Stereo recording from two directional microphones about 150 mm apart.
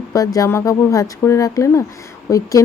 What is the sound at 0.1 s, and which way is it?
Speech, 25° left (ahead or behind).